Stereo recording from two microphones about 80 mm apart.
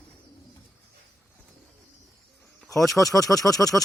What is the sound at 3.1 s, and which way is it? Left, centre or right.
Speech, left.